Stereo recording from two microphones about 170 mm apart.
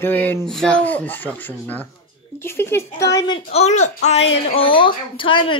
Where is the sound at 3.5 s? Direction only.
40° left (ahead or behind).